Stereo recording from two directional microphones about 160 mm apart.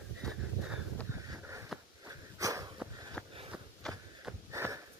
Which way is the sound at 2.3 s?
20° right (ahead or behind).